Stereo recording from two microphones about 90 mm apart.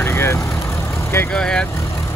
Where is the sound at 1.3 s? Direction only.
10° left (ahead or behind).